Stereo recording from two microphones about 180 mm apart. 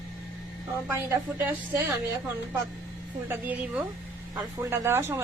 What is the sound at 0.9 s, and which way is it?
Speech, 15° right (ahead or behind).